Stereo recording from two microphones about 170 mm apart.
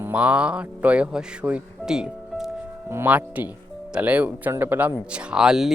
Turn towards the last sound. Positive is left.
turn(degrees=-5)  # may be behind; listen again after turning